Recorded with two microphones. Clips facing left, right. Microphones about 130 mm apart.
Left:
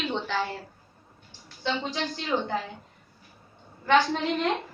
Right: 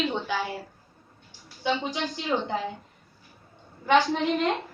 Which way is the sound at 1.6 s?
15° right (ahead or behind).